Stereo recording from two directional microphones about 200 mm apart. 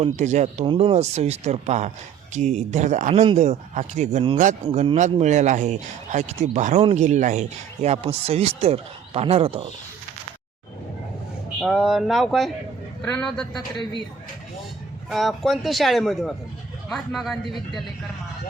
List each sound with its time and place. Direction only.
0.0 s speech: 35° right (ahead or behind)
11.6 s speech: centre (ahead or behind)
15.1 s speech: centre (ahead or behind)